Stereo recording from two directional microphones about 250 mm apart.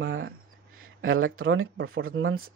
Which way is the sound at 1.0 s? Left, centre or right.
Right.